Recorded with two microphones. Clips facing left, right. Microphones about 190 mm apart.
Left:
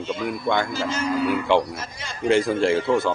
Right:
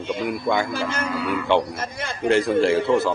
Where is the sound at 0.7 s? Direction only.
55° right (ahead or behind).